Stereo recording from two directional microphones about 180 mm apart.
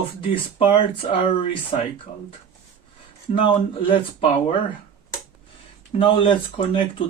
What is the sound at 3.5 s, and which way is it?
Speech, 30° left (ahead or behind).